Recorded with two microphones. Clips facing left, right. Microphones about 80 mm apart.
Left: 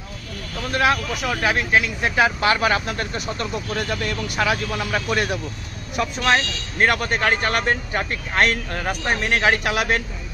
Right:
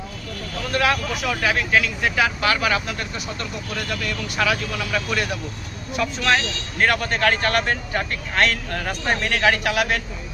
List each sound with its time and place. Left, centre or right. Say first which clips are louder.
0.7 s speech: left 1 dB; left
8.9 s speech: left 1 dB; centre
9.3 s speech: left 1 dB; left